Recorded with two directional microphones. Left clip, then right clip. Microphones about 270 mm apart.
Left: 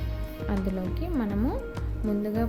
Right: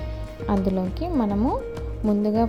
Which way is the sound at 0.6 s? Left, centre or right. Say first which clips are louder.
Right 7 dB; centre.